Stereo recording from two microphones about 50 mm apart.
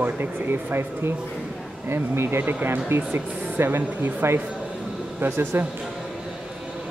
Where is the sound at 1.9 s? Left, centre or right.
Right.